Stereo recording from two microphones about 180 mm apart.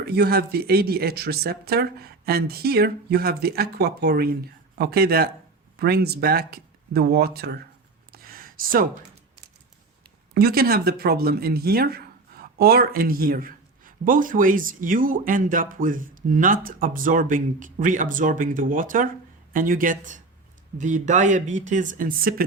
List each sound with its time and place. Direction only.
0.2 s speech: 60° right (ahead or behind)
8.1 s a sound: 55° right (ahead or behind)
10.3 s speech: 60° right (ahead or behind)